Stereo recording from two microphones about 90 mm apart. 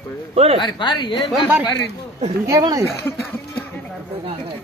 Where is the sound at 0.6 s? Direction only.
60° left (ahead or behind).